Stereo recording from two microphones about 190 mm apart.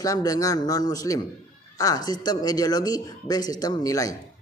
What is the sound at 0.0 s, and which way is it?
A man's voice, 20° left (ahead or behind).